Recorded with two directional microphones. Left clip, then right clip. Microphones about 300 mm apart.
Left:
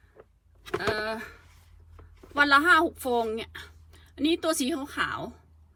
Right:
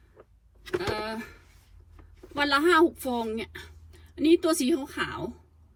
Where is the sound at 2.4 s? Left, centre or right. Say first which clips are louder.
Left 2 dB; centre.